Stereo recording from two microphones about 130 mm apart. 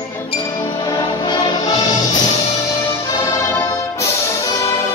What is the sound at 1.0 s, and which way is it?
Music, 35° left (ahead or behind).